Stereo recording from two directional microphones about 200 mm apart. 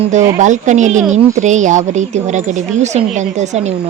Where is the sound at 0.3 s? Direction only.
40° right (ahead or behind).